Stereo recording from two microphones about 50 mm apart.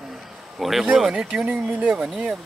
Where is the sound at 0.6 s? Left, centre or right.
Centre.